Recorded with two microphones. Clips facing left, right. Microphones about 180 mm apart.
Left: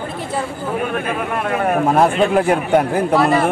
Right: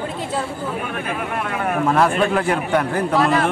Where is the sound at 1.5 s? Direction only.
40° left (ahead or behind).